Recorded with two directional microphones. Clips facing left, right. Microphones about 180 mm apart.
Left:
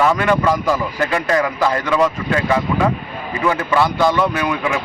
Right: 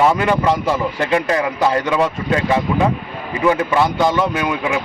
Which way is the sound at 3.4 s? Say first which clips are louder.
Right 2 dB; 15° right (ahead or behind).